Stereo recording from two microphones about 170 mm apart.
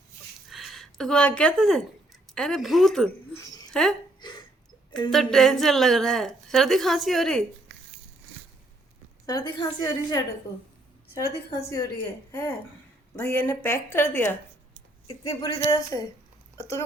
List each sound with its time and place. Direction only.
0.5 s a woman's voice: centre (ahead or behind)
4.2 s a sound: 25° left (ahead or behind)
4.9 s speech: 25° left (ahead or behind)
5.1 s a woman's voice: centre (ahead or behind)
9.2 s a woman's voice: 25° left (ahead or behind)
11.2 s a woman's voice: 75° left (ahead or behind)
12.3 s speech: 15° left (ahead or behind)
15.3 s a woman's voice: 20° left (ahead or behind)
16.6 s a sound: 20° left (ahead or behind)